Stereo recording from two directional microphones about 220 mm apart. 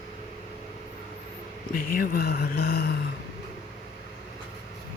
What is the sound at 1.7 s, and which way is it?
Speech, 40° left (ahead or behind).